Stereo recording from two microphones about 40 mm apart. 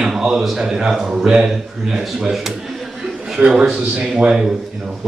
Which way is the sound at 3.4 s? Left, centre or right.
Right.